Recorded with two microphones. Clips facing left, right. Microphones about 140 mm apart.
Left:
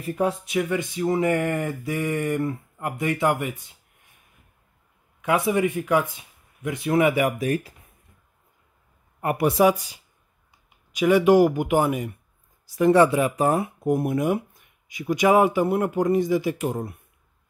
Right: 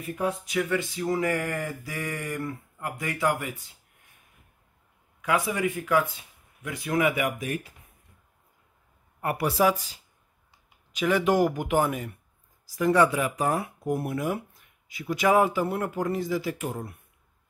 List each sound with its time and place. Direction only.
0.0 s speech: 30° left (ahead or behind)
5.2 s speech: 25° left (ahead or behind)
9.2 s speech: 20° left (ahead or behind)
11.0 s speech: 10° left (ahead or behind)
12.6 s speech: 25° left (ahead or behind)